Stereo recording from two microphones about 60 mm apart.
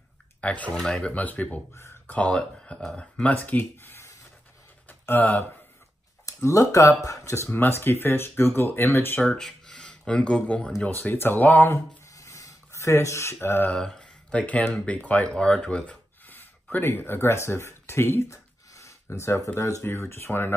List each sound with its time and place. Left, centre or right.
0.4 s speech: left
3.8 s a sound: left
5.2 s speech: left
6.2 s speech: left
7.5 s speech: left
9.4 s speech: centre
10.9 s speech: left
12.2 s a sound: left
13.4 s speech: left
13.7 s a sound: centre
14.7 s speech: left
16.7 s speech: left